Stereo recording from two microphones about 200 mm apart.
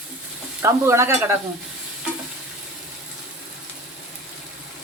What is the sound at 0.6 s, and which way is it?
Speech, 15° right (ahead or behind).